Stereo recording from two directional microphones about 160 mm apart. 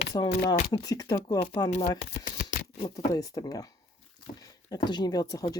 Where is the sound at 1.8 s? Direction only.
70° left (ahead or behind).